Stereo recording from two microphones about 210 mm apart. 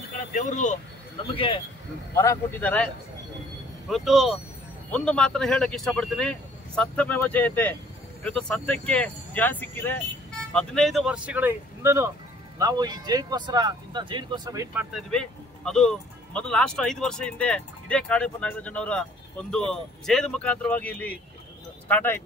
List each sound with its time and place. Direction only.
0.3 s speech: 35° left (ahead or behind)
2.1 s speech: 10° left (ahead or behind)
3.9 s speech: centre (ahead or behind); by 14.9 s 15° right (ahead or behind)
15.0 s speech: 5° left (ahead or behind)